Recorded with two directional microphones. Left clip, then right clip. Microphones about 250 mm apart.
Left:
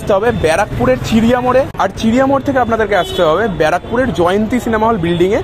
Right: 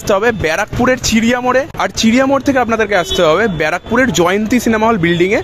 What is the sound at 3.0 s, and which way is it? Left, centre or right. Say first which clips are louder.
A man's voice: right 3 dB; right.